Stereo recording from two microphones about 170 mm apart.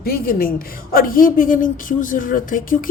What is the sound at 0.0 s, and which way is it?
A woman's voice, 60° left (ahead or behind).